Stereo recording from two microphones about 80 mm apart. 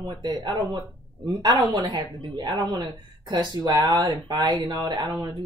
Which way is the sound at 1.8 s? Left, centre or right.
Right.